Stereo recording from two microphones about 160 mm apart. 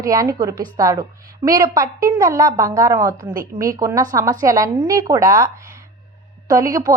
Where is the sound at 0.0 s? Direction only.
20° right (ahead or behind).